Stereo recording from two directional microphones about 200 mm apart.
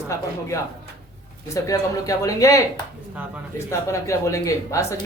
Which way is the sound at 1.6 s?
15° left (ahead or behind).